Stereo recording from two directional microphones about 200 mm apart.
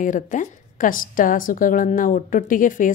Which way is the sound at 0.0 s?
40° left (ahead or behind).